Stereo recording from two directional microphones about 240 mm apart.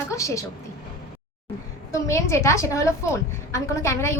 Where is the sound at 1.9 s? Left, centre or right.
Centre.